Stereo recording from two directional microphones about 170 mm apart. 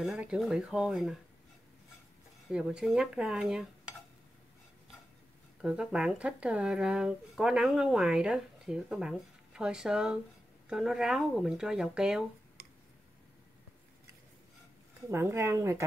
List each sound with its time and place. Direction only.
0.0 s speech: 5° right (ahead or behind)
2.5 s speech: 5° right (ahead or behind)
5.6 s speech: 5° right (ahead or behind)
12.6 s tick: 65° right (ahead or behind)
15.0 s speech: 15° right (ahead or behind)